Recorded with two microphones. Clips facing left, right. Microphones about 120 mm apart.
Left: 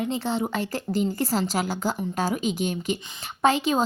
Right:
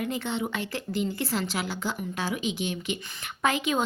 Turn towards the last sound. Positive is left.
turn(degrees=30)  # may be behind; listen again after turning